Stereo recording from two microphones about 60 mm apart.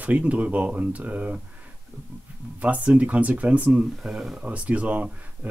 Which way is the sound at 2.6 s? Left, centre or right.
Right.